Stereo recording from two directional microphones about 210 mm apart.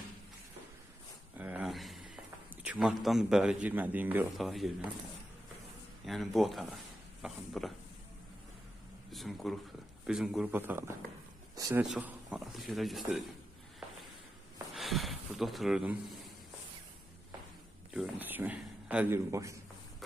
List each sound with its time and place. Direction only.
1.4 s a sound: 5° right (ahead or behind)
2.5 s a man's voice: 5° right (ahead or behind)
6.0 s a man's voice: centre (ahead or behind)
9.1 s a man's voice: centre (ahead or behind); by 11.8 s 15° right (ahead or behind)
11.8 s a man's voice: 5° right (ahead or behind)
14.7 s a sound: centre (ahead or behind)
17.9 s a man's voice: 5° right (ahead or behind)